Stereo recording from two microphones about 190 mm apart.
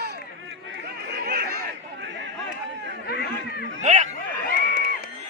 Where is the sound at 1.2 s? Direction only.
55° right (ahead or behind).